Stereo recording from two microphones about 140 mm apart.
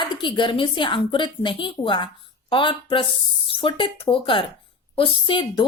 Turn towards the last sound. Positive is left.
turn(degrees=35)  # may be behind; listen again after turning